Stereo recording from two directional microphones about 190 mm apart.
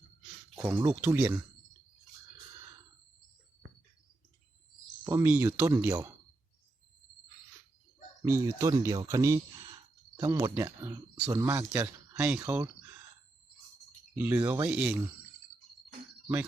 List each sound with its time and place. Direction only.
0.6 s speech: 15° right (ahead or behind)
5.0 s speech: 15° right (ahead or behind)
8.2 s speech: 15° right (ahead or behind)
14.2 s speech: 10° right (ahead or behind)